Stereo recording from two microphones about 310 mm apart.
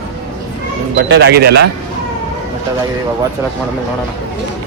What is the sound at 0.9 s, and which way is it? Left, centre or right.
Speech, right.